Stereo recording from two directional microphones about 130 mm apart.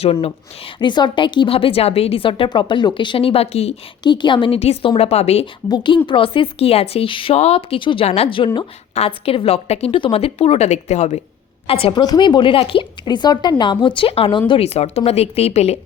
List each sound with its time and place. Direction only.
0.0 s a woman's voice: 50° left (ahead or behind)
4.0 s a woman's voice: 35° left (ahead or behind); by 5.5 s 50° left (ahead or behind)
5.6 s a woman's voice: 35° left (ahead or behind); by 11.2 s 60° left (ahead or behind)
11.7 s a woman's voice: 45° left (ahead or behind)